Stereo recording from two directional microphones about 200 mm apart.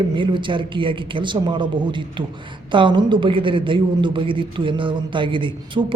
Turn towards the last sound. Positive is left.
turn(degrees=-25)  # may be behind; listen again after turning